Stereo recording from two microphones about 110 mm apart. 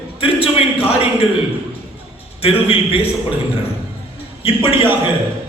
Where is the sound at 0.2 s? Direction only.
60° left (ahead or behind).